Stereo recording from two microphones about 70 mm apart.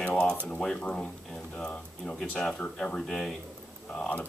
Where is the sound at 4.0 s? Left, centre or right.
Left.